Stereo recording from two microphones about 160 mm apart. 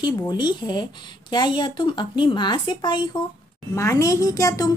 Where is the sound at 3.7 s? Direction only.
20° left (ahead or behind).